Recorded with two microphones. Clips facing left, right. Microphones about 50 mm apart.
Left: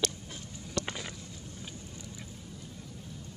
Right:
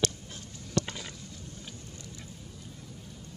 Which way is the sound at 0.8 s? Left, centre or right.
Centre.